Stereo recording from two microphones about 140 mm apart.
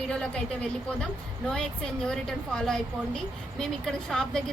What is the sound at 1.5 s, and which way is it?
Speech, 5° left (ahead or behind).